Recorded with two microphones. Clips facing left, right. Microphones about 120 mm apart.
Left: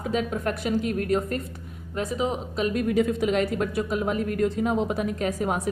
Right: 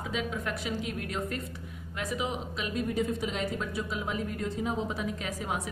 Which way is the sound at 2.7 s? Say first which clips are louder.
Left 5 dB; 75° left (ahead or behind).